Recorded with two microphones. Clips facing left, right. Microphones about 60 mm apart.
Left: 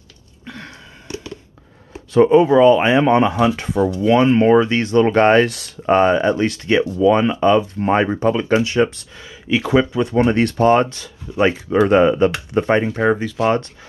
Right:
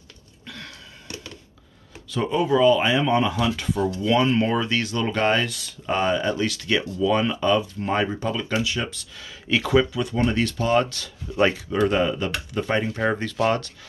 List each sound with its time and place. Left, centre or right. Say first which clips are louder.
0.5 s a sound: left 5 dB; left
2.1 s speech: left 10 dB; left
3.3 s speech: left 7 dB; left
3.8 s speech: left 7 dB; left
5.9 s speech: left 8 dB; left
9.5 s speech: left 4 dB; centre
10.3 s speech: left 7 dB; left
11.3 s speech: left 4 dB; centre
11.9 s speech: left 9 dB; left
12.9 s speech: left 6 dB; centre